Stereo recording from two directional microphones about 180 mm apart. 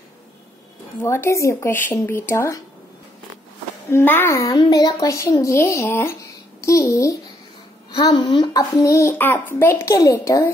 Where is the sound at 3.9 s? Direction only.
10° left (ahead or behind).